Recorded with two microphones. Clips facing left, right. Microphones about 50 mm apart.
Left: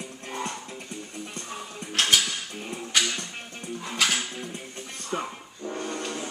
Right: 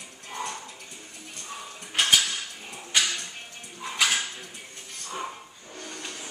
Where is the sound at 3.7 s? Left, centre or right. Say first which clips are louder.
Even; centre.